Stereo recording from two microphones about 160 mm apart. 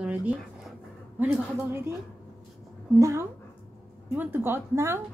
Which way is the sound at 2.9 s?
20° right (ahead or behind).